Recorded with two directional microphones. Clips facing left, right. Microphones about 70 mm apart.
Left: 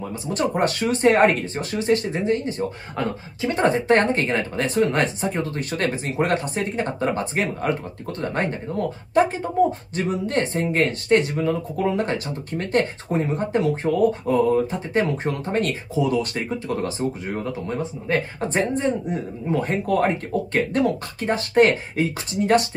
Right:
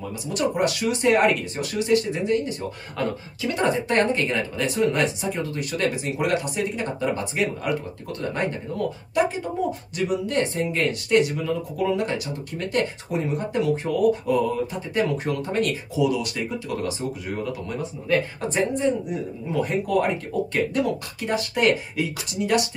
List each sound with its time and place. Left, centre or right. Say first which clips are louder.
0.3 s speech: left 1 dB; left